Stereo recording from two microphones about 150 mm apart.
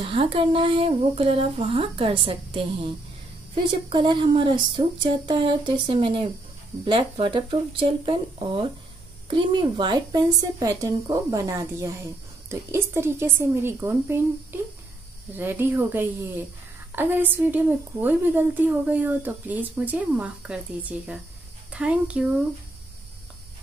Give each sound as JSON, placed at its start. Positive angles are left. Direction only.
{"t": 0.0, "sound": "a woman's voice", "side_deg": -35}